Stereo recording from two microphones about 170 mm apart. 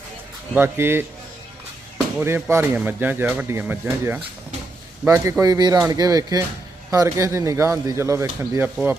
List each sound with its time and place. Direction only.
0.5 s speech: 15° right (ahead or behind)
2.1 s speech: 15° right (ahead or behind)